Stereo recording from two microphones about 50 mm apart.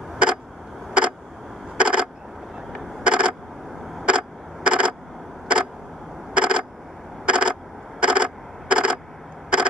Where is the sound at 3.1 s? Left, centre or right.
Right.